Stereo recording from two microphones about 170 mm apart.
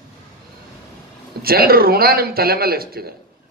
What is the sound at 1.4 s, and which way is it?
A man's voice, 60° right (ahead or behind).